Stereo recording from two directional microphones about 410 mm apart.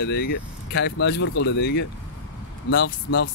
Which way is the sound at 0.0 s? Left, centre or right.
Left.